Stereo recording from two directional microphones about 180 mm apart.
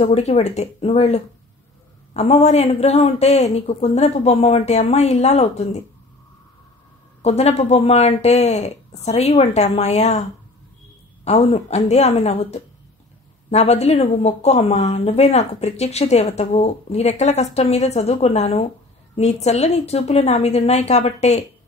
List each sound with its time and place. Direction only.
0.0 s speech: 35° left (ahead or behind)
7.2 s speech: 35° left (ahead or behind)
11.2 s speech: 35° left (ahead or behind)